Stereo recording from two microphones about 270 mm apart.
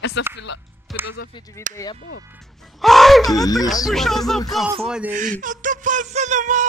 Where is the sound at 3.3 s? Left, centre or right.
Centre.